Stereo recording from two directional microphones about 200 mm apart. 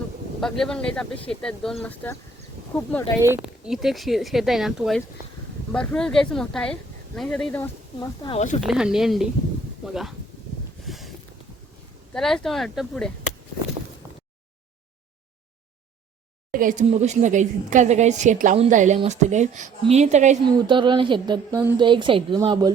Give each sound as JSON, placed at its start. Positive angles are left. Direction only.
{"t": 0.3, "sound": "speech", "side_deg": 0}
{"t": 3.2, "sound": "speech", "side_deg": -15}
{"t": 3.4, "sound": "speech", "side_deg": 0}
{"t": 8.2, "sound": "speech", "side_deg": 25}
{"t": 8.6, "sound": "speech", "side_deg": -5}
{"t": 10.8, "sound": "a sound", "side_deg": 0}
{"t": 12.1, "sound": "speech", "side_deg": 0}
{"t": 16.5, "sound": "a woman's voice", "side_deg": -45}
{"t": 20.5, "sound": "speech", "side_deg": -20}